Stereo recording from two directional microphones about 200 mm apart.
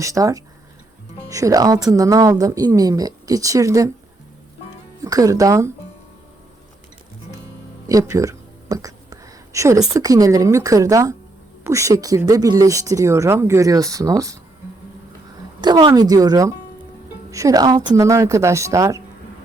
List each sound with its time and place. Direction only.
0.0 s speech: 15° right (ahead or behind)
5.0 s speech: 15° right (ahead or behind)
7.9 s speech: 15° right (ahead or behind)
15.6 s speech: 20° right (ahead or behind)